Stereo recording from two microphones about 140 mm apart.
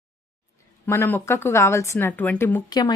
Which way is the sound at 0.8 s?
15° left (ahead or behind).